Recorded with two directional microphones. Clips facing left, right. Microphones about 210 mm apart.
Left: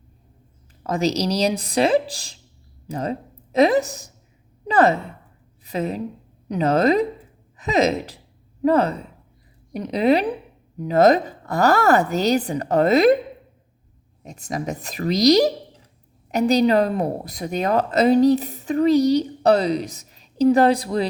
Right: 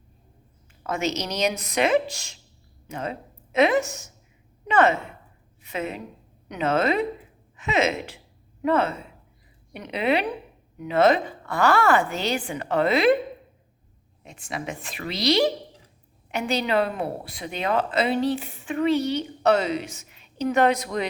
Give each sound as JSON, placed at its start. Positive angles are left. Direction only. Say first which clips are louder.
{"t": 0.9, "sound": "speech", "louder": "left 6 dB", "side_deg": 35}
{"t": 14.2, "sound": "speech", "louder": "left 5 dB", "side_deg": 40}